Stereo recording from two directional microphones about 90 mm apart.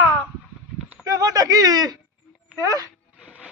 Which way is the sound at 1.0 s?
40° right (ahead or behind).